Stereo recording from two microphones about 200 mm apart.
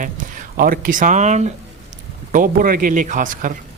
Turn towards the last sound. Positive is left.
turn(degrees=-40)  # may be behind; listen again after turning